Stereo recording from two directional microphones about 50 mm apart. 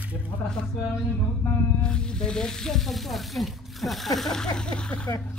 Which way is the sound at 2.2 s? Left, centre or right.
Centre.